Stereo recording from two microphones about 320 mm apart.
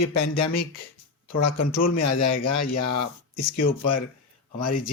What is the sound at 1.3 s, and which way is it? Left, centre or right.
Speech, left.